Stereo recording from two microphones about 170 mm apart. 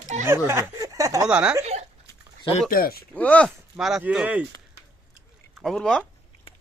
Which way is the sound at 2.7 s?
60° left (ahead or behind).